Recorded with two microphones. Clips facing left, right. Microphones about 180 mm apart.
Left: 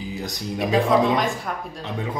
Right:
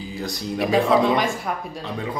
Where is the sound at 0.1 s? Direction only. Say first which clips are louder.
Right 1 dB; 20° left (ahead or behind).